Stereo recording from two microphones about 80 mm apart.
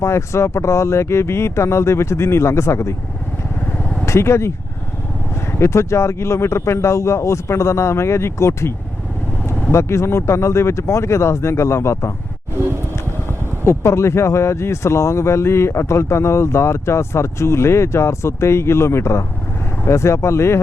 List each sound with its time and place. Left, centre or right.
0.0 s speech: left
4.0 s speech: left
5.5 s speech: left
9.7 s speech: left
13.7 s speech: left